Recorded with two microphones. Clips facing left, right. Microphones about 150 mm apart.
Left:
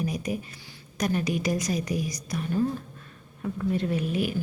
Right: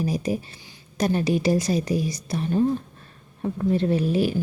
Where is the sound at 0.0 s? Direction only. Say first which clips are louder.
Right 5 dB; 30° right (ahead or behind).